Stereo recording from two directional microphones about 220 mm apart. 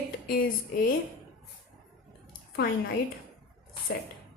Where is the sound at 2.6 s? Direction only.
45° left (ahead or behind).